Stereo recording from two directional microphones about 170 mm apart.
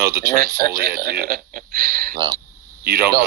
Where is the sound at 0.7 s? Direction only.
60° right (ahead or behind).